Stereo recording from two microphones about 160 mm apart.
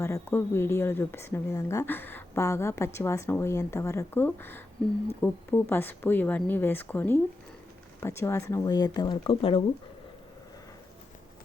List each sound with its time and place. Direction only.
0.0 s speech: 15° left (ahead or behind); by 9.6 s 35° left (ahead or behind)